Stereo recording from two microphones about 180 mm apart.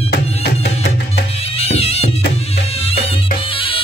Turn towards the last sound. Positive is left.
turn(degrees=30)  # may be behind; listen again after turning